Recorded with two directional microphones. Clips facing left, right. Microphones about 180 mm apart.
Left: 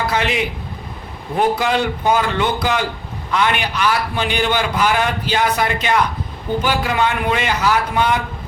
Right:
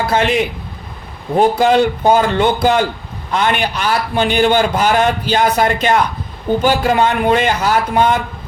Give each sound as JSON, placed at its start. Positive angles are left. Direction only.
{"t": 0.1, "sound": "a man's voice", "side_deg": -45}
{"t": 1.4, "sound": "a man's voice", "side_deg": -40}